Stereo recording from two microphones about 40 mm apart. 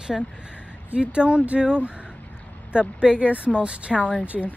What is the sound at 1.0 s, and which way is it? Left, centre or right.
Speech, right.